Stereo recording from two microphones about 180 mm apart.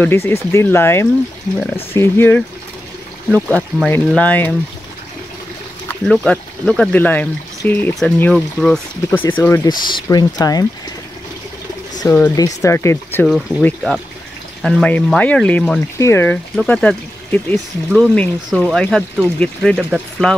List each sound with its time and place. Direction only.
0.0 s speech: 10° left (ahead or behind)
5.9 s speech: 5° left (ahead or behind)
9.8 s speech: 25° left (ahead or behind)
12.0 s speech: 20° left (ahead or behind); by 20.3 s 5° left (ahead or behind)